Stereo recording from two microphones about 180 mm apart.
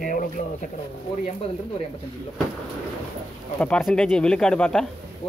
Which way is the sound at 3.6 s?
5° left (ahead or behind).